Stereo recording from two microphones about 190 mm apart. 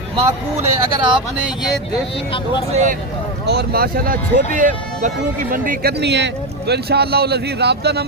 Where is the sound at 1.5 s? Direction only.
5° right (ahead or behind).